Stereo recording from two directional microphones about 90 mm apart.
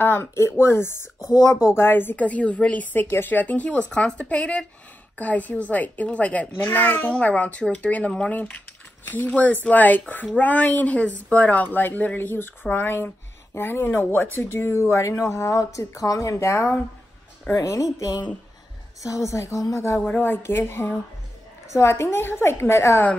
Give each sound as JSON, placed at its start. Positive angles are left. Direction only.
{"t": 0.0, "sound": "a child's voice", "side_deg": 25}
{"t": 20.1, "sound": "speech", "side_deg": 25}